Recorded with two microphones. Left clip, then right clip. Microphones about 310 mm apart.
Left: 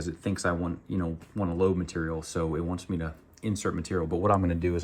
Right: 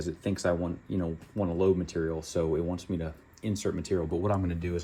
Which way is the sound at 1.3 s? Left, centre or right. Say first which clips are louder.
Right 1 dB; left.